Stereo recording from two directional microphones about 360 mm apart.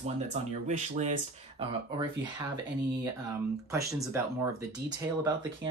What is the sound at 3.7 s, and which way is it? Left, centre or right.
Speech, centre.